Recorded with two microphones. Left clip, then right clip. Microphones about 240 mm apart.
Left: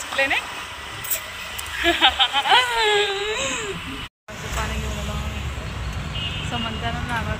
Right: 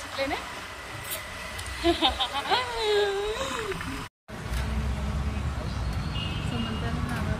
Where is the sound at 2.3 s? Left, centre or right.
Centre.